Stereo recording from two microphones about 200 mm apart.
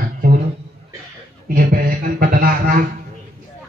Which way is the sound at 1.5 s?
45° right (ahead or behind).